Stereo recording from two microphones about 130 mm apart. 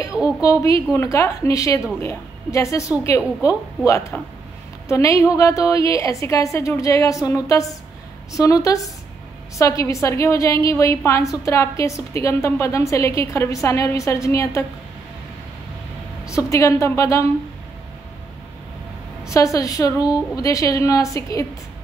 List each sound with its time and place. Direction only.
0.4 s a woman's voice: 25° left (ahead or behind)
9.6 s a woman's voice: 25° left (ahead or behind)
16.3 s a woman's voice: 25° left (ahead or behind)
19.2 s a woman's voice: 25° left (ahead or behind)